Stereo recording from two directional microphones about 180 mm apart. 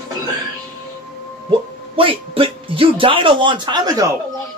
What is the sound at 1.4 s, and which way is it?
Speech, 30° right (ahead or behind).